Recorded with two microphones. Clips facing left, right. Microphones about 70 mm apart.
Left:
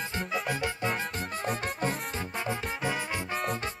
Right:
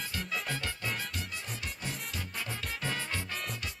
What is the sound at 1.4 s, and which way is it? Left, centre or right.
Music, left.